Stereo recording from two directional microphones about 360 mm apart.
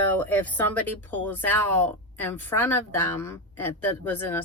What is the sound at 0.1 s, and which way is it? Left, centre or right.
Speech, centre.